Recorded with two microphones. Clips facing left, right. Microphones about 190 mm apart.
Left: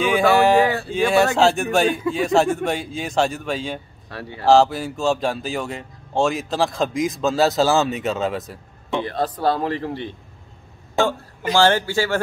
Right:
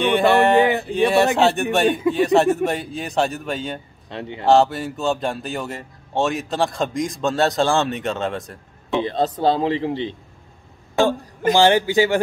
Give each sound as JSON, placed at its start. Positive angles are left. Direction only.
{"t": 0.0, "sound": "speech", "side_deg": 0}
{"t": 0.7, "sound": "a sound", "side_deg": -20}
{"t": 0.9, "sound": "speech", "side_deg": 0}
{"t": 4.1, "sound": "speech", "side_deg": -20}
{"t": 4.5, "sound": "speech", "side_deg": 0}
{"t": 8.9, "sound": "speech", "side_deg": -20}
{"t": 11.5, "sound": "speech", "side_deg": -15}